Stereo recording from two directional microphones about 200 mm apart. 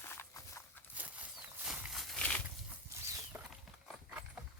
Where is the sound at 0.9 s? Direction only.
5° right (ahead or behind).